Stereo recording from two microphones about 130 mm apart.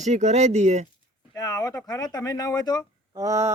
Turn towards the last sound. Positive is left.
turn(degrees=-25)  # may be behind; listen again after turning